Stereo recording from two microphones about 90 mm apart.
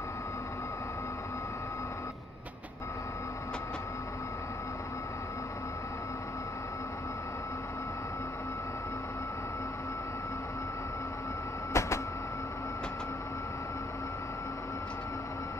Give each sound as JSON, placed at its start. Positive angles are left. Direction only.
{"t": 11.7, "sound": "printer", "side_deg": 35}